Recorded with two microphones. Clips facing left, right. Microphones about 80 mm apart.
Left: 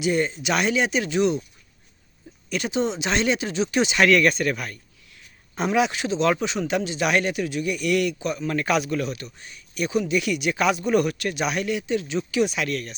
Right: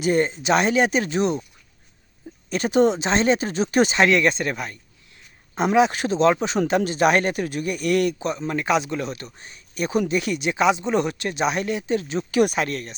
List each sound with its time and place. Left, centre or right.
0.0 s speech: right
2.5 s speech: right
3.0 s speech: right
4.0 s speech: right
5.9 s speech: right
8.4 s speech: right
12.6 s speech: right